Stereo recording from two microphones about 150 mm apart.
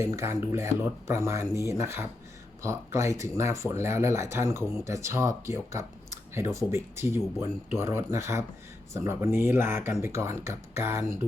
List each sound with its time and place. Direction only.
0.0 s speech: 15° right (ahead or behind)